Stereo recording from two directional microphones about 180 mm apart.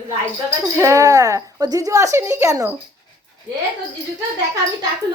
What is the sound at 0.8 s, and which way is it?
Speech, 15° right (ahead or behind).